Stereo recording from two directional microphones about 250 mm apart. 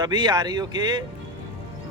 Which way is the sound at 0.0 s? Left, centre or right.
Centre.